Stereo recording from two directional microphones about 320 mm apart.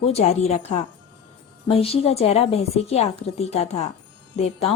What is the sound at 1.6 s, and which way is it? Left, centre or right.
A woman's voice, centre.